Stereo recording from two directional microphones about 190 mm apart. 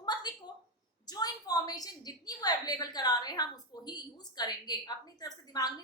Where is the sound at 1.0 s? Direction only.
20° left (ahead or behind).